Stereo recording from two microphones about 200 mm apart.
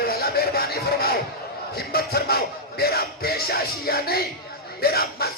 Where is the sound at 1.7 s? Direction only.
50° left (ahead or behind).